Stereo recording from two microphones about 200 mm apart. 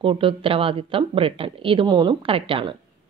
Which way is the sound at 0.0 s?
25° right (ahead or behind).